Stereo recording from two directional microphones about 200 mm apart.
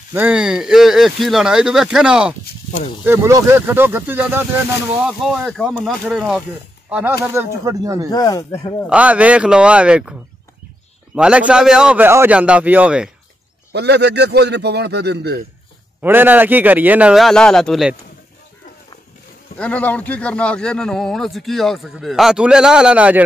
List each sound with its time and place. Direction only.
0.1 s a man's voice: 5° right (ahead or behind)
8.1 s speech: 15° left (ahead or behind)
8.8 s a man's voice: 5° right (ahead or behind)
11.1 s a man's voice: 5° right (ahead or behind)
13.7 s a man's voice: 55° right (ahead or behind)
16.0 s a man's voice: 10° right (ahead or behind)
19.6 s a man's voice: 5° left (ahead or behind)